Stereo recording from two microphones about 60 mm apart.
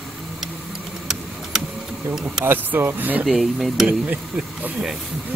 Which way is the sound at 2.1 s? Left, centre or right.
Centre.